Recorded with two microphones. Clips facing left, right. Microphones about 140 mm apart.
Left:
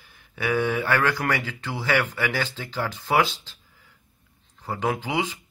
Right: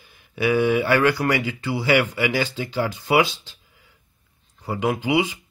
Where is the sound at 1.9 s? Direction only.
10° right (ahead or behind).